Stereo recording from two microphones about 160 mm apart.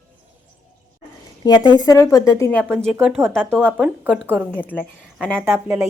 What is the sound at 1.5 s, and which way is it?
A woman's voice, 25° left (ahead or behind).